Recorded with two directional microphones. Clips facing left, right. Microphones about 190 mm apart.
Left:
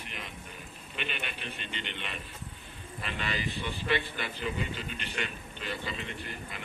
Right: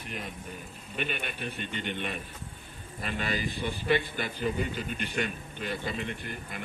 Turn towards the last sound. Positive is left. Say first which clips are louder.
# right 2 dB
turn(degrees=-50)  # may be behind; listen again after turning